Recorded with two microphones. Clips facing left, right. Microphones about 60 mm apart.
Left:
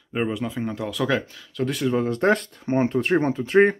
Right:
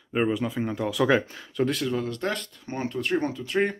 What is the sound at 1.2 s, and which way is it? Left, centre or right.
Speech, right.